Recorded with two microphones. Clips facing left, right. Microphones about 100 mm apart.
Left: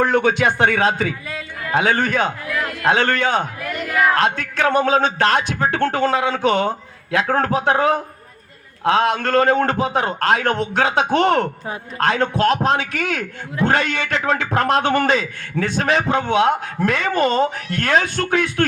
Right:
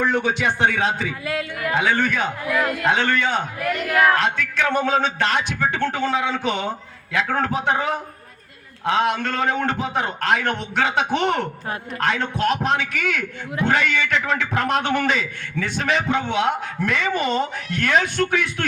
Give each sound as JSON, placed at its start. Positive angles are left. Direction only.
{"t": 0.0, "sound": "speech", "side_deg": 60}
{"t": 1.3, "sound": "a man's voice", "side_deg": -10}
{"t": 1.7, "sound": "a man's voice", "side_deg": 40}